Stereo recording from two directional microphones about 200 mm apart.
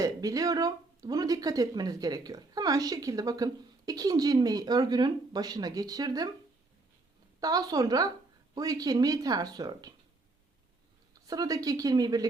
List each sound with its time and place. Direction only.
0.0 s speech: 15° right (ahead or behind)
7.3 s speech: 20° right (ahead or behind)
11.1 s speech: 20° right (ahead or behind)